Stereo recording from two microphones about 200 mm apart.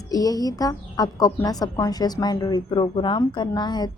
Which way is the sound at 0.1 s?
20° left (ahead or behind).